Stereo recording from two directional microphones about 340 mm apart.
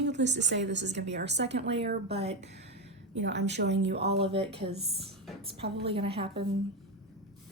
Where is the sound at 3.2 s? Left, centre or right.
Right.